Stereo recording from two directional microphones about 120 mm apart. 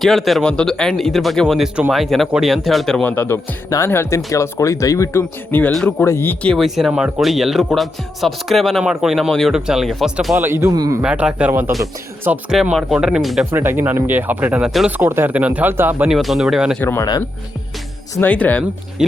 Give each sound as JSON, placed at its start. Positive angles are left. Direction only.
{"t": 0.0, "sound": "speech", "side_deg": 0}
{"t": 3.0, "sound": "speech", "side_deg": 15}
{"t": 6.6, "sound": "speech", "side_deg": 0}
{"t": 10.3, "sound": "a man's voice", "side_deg": -20}
{"t": 11.0, "sound": "speech", "side_deg": -10}
{"t": 12.5, "sound": "speech", "side_deg": -5}
{"t": 13.5, "sound": "speech", "side_deg": -15}
{"t": 16.1, "sound": "speech", "side_deg": 0}
{"t": 16.8, "sound": "speech", "side_deg": 20}
{"t": 18.2, "sound": "speech", "side_deg": 15}